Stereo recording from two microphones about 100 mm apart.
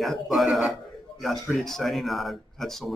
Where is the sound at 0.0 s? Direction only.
Centre (ahead or behind).